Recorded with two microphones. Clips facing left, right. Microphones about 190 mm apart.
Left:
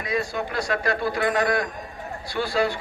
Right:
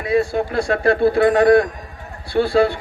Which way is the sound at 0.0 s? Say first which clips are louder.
Right 8 dB; 30° right (ahead or behind).